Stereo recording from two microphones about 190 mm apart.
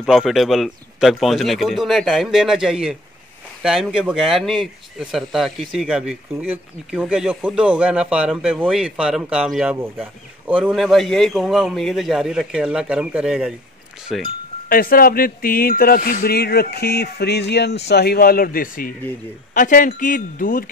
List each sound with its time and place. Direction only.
0.0 s speech: centre (ahead or behind)
14.7 s speech: 50° left (ahead or behind)